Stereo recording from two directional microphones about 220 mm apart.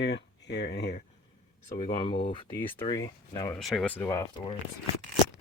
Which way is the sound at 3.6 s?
Centre (ahead or behind).